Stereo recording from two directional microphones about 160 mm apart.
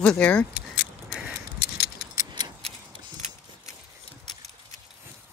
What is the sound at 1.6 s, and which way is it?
Keys jangling, 85° left.